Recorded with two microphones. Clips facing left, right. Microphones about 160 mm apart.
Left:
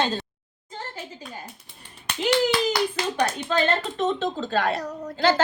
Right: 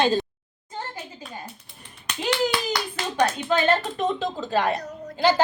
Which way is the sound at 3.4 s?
10° right (ahead or behind).